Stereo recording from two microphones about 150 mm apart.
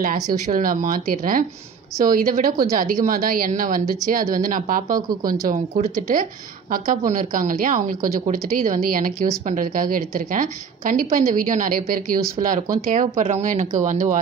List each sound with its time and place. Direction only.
0.0 s a woman's voice: 70° right (ahead or behind)
7.1 s a woman's voice: 60° right (ahead or behind)